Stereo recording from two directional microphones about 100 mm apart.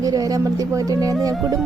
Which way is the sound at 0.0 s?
40° right (ahead or behind).